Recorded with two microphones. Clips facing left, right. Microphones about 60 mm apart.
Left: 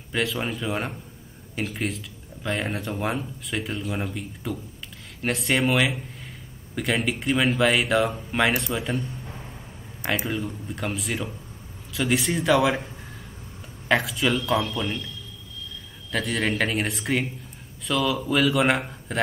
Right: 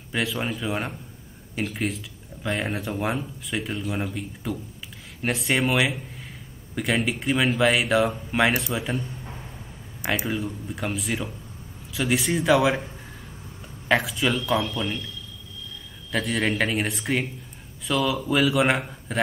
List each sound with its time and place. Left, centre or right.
0.1 s speech: centre
10.2 s speech: centre
16.1 s speech: centre